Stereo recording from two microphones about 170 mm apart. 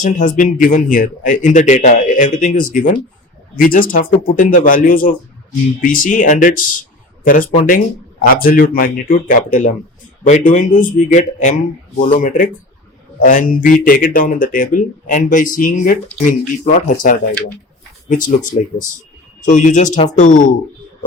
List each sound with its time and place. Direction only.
0.0 s speech: 50° left (ahead or behind)
8.2 s speech: 60° left (ahead or behind)